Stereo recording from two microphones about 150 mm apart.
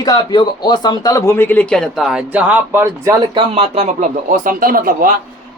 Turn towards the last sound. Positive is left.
turn(degrees=-70)  # may be behind; listen again after turning